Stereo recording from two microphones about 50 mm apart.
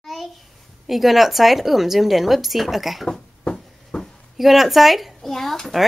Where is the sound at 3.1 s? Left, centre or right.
Centre.